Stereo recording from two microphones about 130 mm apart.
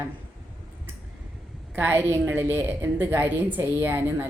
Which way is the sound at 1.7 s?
15° right (ahead or behind).